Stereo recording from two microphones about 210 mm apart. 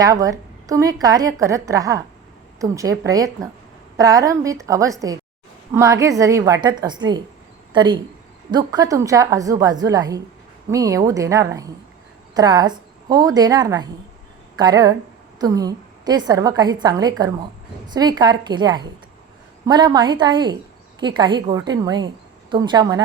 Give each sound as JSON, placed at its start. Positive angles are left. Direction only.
{"t": 0.0, "sound": "a woman's voice", "side_deg": -15}